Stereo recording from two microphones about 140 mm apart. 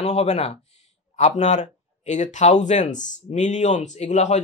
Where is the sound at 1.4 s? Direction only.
60° left (ahead or behind).